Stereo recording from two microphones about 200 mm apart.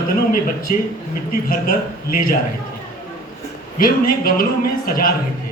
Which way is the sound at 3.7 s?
45° left (ahead or behind).